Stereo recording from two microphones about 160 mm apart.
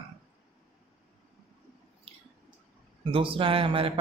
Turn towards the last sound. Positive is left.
turn(degrees=-35)  # may be behind; listen again after turning